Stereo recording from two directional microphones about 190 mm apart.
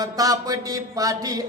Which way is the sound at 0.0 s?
20° right (ahead or behind).